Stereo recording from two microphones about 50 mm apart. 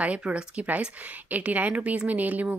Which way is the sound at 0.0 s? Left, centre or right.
Right.